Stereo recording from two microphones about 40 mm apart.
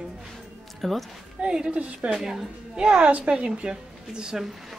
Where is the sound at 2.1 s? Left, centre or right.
Centre.